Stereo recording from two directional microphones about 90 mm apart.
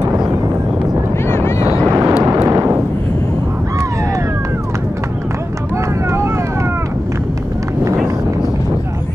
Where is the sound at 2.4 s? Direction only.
30° right (ahead or behind).